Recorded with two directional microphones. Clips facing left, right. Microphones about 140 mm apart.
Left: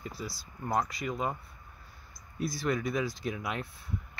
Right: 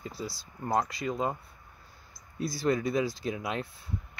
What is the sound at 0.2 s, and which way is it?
Speech, 30° right (ahead or behind).